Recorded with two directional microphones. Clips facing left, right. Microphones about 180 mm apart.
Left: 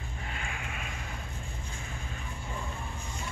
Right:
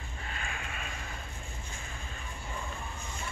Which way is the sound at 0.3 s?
15° left (ahead or behind).